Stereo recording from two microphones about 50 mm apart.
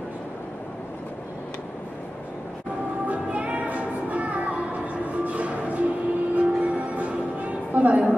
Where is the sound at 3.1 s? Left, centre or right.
Right.